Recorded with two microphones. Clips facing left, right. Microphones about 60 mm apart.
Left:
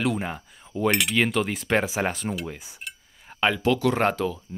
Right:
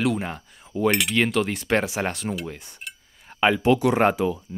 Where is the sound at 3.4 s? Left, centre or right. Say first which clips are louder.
Right 3 dB; centre.